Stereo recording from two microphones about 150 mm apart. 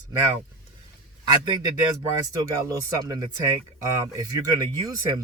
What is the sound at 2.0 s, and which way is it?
Speech, 20° right (ahead or behind).